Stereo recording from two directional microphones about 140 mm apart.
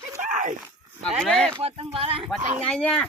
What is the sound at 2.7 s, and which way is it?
Speech, 5° left (ahead or behind).